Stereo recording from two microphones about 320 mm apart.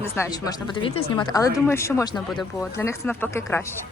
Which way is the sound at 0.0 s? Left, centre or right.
Centre.